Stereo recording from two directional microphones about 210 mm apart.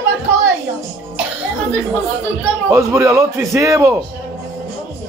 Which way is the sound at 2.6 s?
15° right (ahead or behind).